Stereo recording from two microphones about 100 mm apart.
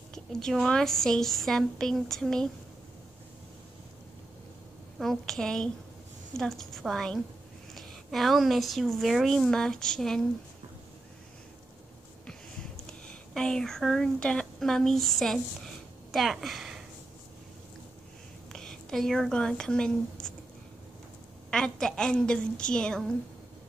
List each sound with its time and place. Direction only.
0.1 s a woman's voice: 5° left (ahead or behind)
4.9 s a woman's voice: centre (ahead or behind)
13.3 s speech: 5° left (ahead or behind)
18.5 s speech: 5° left (ahead or behind)
21.5 s a woman's voice: 5° left (ahead or behind)